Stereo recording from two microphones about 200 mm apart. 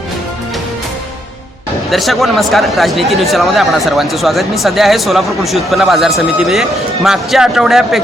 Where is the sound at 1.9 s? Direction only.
Centre (ahead or behind).